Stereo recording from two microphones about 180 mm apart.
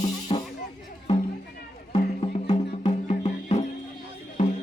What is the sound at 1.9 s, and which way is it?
Music, 35° left (ahead or behind).